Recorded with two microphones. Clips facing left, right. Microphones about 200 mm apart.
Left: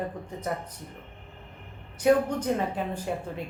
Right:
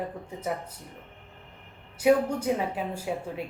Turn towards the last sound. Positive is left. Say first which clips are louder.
# even
turn(degrees=-10)  # may be behind; listen again after turning